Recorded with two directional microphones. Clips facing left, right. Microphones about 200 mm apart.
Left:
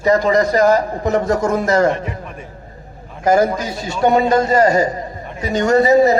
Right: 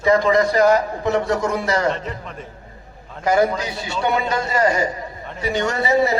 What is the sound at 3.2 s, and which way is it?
Speech, 45° left (ahead or behind).